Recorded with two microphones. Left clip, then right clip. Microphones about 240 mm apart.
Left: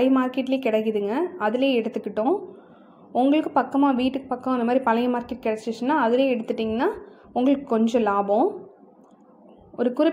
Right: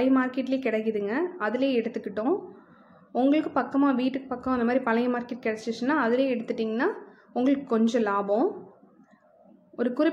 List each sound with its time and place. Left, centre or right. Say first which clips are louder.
0.0 s a woman's voice: left 3 dB; centre
5.5 s a woman's voice: left 4 dB; centre
5.8 s a woman's voice: left 4 dB; centre
9.8 s a woman's voice: left 4 dB; centre